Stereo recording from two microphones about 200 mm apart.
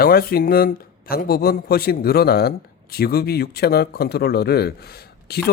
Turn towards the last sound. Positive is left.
turn(degrees=50)  # may be behind; listen again after turning